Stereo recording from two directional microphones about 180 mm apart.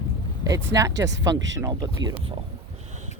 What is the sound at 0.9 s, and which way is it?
Speech, 80° right.